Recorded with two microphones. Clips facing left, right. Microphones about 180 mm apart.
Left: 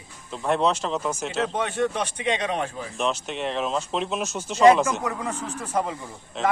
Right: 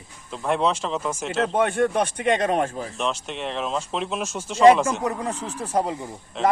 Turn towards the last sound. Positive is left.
turn(degrees=5)  # may be behind; listen again after turning